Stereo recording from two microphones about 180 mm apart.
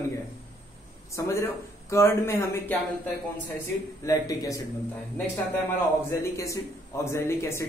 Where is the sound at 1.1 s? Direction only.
15° left (ahead or behind).